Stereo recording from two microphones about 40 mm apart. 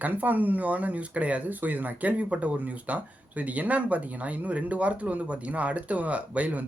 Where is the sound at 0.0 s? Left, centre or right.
Right.